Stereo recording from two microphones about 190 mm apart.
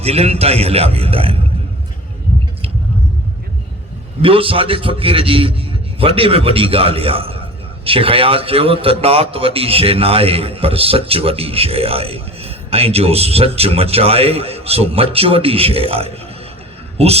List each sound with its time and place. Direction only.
0.0 s a man's voice: 30° right (ahead or behind)
4.2 s a man's voice: 30° right (ahead or behind)